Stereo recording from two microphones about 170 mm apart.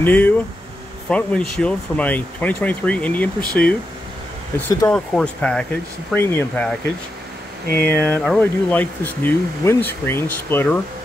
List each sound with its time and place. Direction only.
0.0 s speech: 10° left (ahead or behind)
7.6 s speech: 65° right (ahead or behind)
7.9 s speech: 10° left (ahead or behind)